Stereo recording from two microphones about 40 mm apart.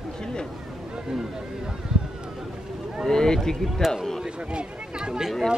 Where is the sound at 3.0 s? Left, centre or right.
Centre.